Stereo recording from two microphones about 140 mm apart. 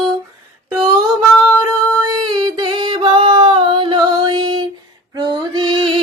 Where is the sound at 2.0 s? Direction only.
30° right (ahead or behind).